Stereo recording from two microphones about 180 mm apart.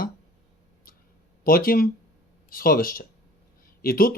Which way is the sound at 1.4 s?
55° left (ahead or behind).